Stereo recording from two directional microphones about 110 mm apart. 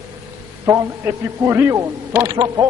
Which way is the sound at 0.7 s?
25° right (ahead or behind).